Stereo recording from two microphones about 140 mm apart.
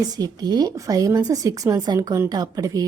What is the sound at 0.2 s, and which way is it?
Speech, 30° right (ahead or behind).